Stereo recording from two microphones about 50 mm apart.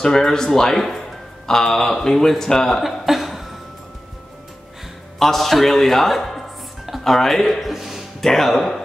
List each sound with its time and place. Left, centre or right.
0.0 s speech: centre
5.2 s a man's voice: centre